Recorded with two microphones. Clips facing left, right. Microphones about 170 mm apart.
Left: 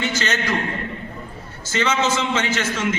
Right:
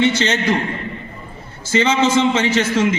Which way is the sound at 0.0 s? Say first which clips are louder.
Right 7 dB; 30° right (ahead or behind).